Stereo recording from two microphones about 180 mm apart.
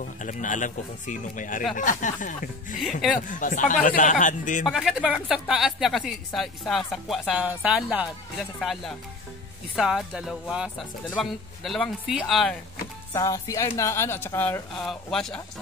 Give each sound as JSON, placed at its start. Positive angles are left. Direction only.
{"t": 0.2, "sound": "speech", "side_deg": 45}
{"t": 4.6, "sound": "speech", "side_deg": 0}
{"t": 13.1, "sound": "a woman's voice", "side_deg": 20}